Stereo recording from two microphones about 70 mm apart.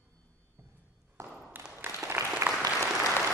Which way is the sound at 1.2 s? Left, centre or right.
Right.